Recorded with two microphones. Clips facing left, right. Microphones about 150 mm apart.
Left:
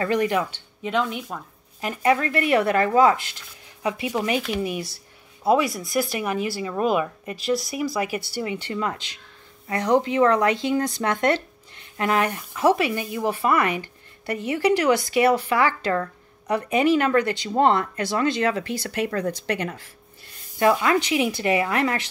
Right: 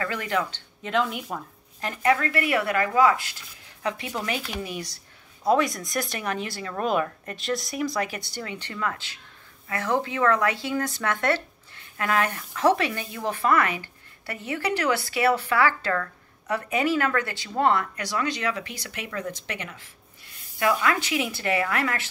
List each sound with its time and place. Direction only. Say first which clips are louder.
0.0 s speech: left 6 dB; 20° left (ahead or behind)
0.8 s speech: left 1 dB; centre (ahead or behind)
1.8 s speech: left 2 dB; 15° left (ahead or behind); by 19.8 s 40° left (ahead or behind)
20.5 s speech: left 5 dB; 25° left (ahead or behind)